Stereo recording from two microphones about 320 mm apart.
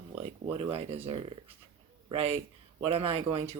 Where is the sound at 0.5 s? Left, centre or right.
Centre.